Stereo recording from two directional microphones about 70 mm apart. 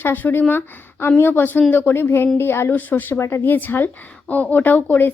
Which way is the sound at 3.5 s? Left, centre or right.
Left.